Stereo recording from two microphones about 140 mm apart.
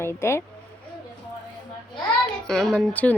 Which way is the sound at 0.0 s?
20° left (ahead or behind).